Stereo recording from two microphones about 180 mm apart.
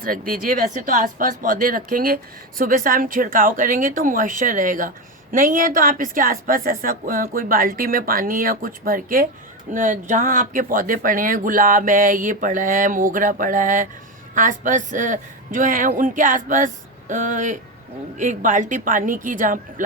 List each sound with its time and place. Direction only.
0.0 s speech: 50° right (ahead or behind)